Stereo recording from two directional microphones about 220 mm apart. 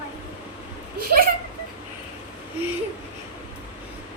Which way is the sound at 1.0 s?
40° right (ahead or behind).